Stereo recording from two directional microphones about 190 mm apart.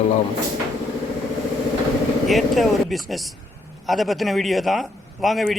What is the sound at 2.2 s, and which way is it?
A man's voice, centre (ahead or behind).